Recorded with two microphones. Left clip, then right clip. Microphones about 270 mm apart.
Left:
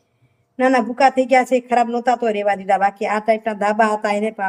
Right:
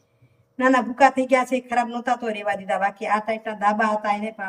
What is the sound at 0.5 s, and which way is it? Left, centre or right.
Speech, centre.